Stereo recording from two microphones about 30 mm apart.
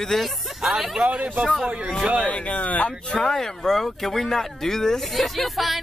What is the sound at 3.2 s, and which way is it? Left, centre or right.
Speech, centre.